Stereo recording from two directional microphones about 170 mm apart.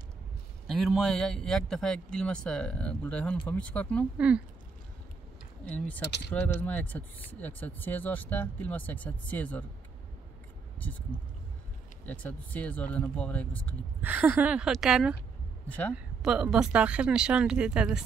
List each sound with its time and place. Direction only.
0.7 s speech: centre (ahead or behind)
5.7 s speech: 10° left (ahead or behind)
6.0 s speech: 75° left (ahead or behind)
6.4 s speech: 10° left (ahead or behind)
12.1 s speech: 10° left (ahead or behind)
14.0 s speech: 10° right (ahead or behind)